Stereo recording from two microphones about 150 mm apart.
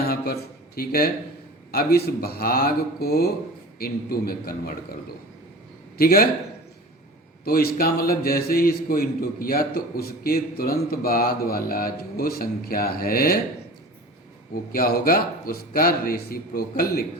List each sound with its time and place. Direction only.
0.0 s a sound: 90° left
0.8 s a man's voice: 90° left
6.0 s a man's voice: 85° left
7.4 s a man's voice: 80° left
14.5 s a man's voice: 75° left (ahead or behind)